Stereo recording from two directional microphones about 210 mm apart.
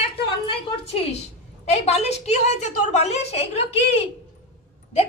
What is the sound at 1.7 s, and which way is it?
A woman's voice, 30° left (ahead or behind).